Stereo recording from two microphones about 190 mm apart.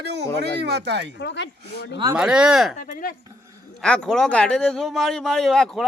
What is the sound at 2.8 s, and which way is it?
Speech, 45° left (ahead or behind).